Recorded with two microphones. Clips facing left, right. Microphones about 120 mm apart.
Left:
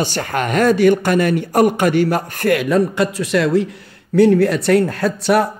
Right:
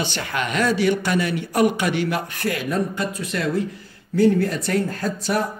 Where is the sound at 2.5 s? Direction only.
80° left.